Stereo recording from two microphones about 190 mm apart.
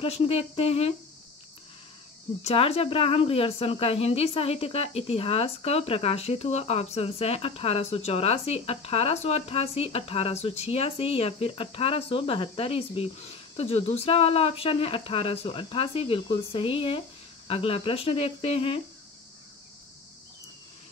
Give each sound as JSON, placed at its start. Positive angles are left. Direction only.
{"t": 0.0, "sound": "speech", "side_deg": 30}
{"t": 2.4, "sound": "speech", "side_deg": 30}